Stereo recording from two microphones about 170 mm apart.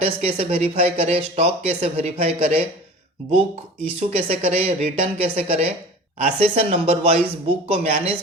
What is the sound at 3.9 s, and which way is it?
A woman's voice, 35° right (ahead or behind).